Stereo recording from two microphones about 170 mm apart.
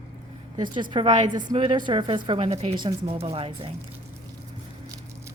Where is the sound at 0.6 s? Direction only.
25° right (ahead or behind).